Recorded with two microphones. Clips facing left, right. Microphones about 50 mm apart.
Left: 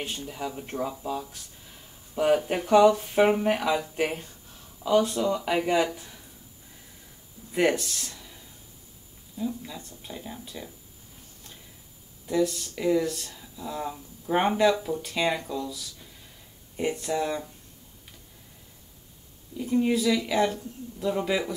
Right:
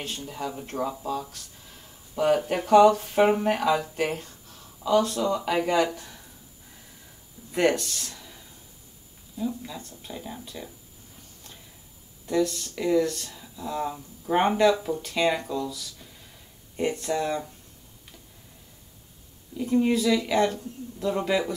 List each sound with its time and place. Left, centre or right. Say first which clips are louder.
0.2 s speech: right 1 dB; centre
0.7 s speech: right 2 dB; right
2.1 s speech: even; centre
7.5 s speech: right 1 dB; centre
9.4 s speech: right 1 dB; centre
12.3 s speech: even; centre
19.5 s speech: right 1 dB; centre